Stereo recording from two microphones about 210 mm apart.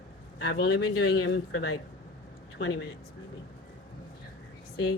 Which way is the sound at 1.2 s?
65° left (ahead or behind).